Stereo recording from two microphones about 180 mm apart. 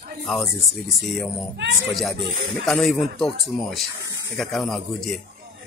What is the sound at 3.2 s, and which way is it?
A man's voice, centre (ahead or behind).